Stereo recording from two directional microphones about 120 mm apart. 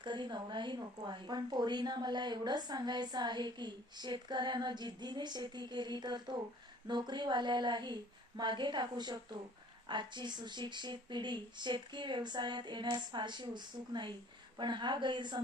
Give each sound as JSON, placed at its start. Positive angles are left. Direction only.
{"t": 0.0, "sound": "a woman's voice", "side_deg": -40}